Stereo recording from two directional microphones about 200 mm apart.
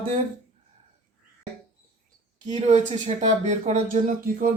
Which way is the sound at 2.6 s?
35° right (ahead or behind).